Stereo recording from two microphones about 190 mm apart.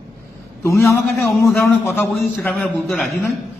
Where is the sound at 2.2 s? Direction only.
Centre (ahead or behind).